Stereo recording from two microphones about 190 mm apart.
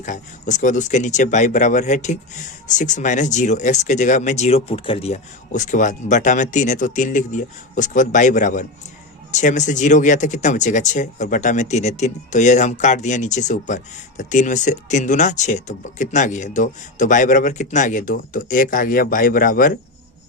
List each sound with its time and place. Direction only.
0.0 s speech: 40° left (ahead or behind)